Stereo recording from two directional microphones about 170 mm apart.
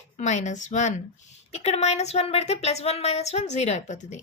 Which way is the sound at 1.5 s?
40° left (ahead or behind).